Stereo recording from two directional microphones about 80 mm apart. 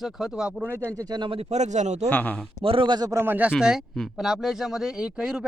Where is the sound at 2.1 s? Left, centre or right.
Left.